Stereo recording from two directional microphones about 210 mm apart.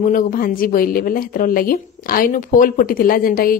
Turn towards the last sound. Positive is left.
turn(degrees=45)  # may be behind; listen again after turning